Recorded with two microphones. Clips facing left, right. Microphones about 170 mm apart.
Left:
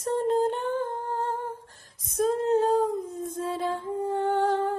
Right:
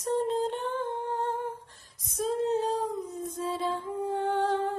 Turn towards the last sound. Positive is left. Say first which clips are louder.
# left 3 dB
turn(degrees=45)  # may be behind; listen again after turning